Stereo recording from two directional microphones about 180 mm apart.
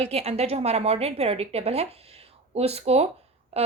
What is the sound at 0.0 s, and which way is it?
A woman's voice, 35° right (ahead or behind).